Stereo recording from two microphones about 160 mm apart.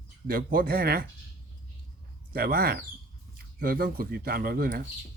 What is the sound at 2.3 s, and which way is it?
Speech, 70° right (ahead or behind).